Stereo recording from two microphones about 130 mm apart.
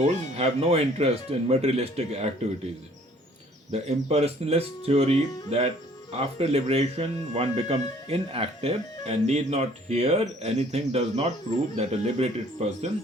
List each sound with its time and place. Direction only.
0.0 s speech: 55° right (ahead or behind)
3.7 s speech: 55° right (ahead or behind)